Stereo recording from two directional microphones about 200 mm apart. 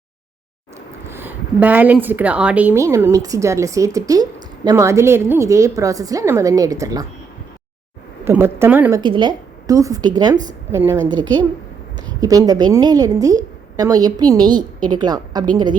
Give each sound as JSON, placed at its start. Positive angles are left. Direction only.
{"t": 1.1, "sound": "a woman's voice", "side_deg": -10}
{"t": 8.2, "sound": "a woman's voice", "side_deg": -10}
{"t": 9.0, "sound": "a woman's voice", "side_deg": -25}